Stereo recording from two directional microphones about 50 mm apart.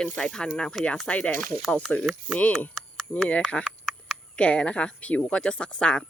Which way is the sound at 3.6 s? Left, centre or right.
Left.